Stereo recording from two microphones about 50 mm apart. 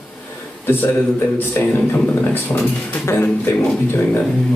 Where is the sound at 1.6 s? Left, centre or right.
Left.